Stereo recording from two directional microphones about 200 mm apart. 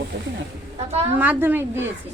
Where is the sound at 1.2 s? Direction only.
10° right (ahead or behind).